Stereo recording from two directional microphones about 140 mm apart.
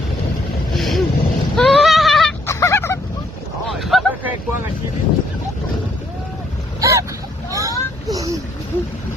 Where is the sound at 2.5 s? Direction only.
20° left (ahead or behind).